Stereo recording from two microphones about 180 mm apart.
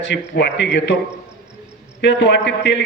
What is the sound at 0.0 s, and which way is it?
Speech, 80° left.